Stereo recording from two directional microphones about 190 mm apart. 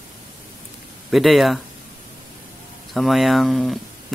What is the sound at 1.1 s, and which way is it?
Speech, centre (ahead or behind).